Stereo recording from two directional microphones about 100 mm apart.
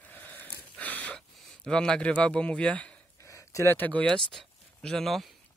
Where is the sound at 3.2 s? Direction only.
30° left (ahead or behind).